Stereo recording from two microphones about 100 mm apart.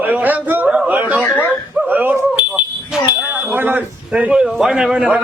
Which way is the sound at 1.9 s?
20° right (ahead or behind).